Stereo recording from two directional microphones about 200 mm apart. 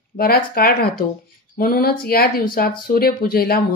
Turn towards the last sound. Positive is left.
turn(degrees=45)  # may be behind; listen again after turning